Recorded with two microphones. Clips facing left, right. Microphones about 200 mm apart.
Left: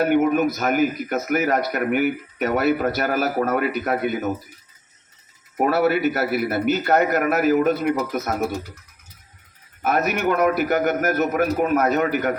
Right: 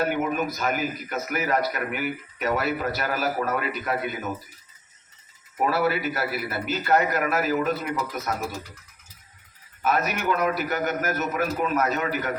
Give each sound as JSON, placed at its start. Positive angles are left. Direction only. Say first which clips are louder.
{"t": 0.0, "sound": "a man's voice", "louder": "left 7 dB", "side_deg": 55}
{"t": 5.5, "sound": "a man's voice", "louder": "left 5 dB", "side_deg": 55}
{"t": 9.8, "sound": "a man's voice", "louder": "left 4 dB", "side_deg": 60}